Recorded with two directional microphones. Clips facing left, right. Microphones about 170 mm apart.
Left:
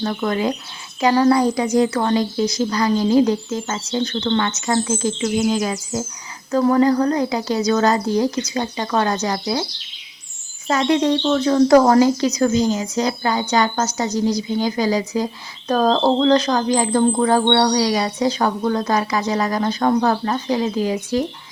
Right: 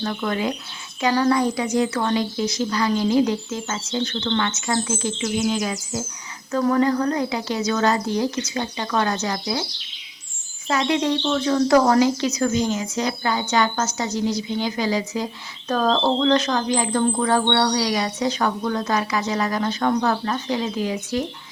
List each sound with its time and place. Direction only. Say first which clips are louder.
0.0 s speech: left 3 dB; 40° left (ahead or behind)
10.7 s speech: left 4 dB; 40° left (ahead or behind)